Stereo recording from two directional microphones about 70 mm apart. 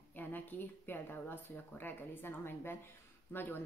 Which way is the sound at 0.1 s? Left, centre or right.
Left.